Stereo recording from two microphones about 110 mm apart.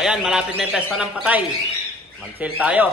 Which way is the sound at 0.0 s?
5° right (ahead or behind).